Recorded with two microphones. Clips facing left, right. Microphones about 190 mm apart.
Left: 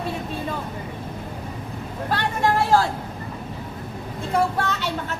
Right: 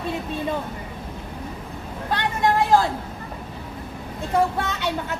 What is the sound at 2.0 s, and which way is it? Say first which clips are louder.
Speech: even; 15° right (ahead or behind).